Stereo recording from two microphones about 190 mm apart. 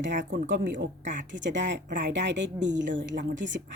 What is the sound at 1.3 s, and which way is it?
A woman's voice, 70° right (ahead or behind).